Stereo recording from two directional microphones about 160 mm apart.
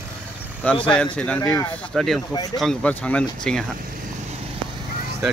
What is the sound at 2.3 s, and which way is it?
Speech, 25° left (ahead or behind).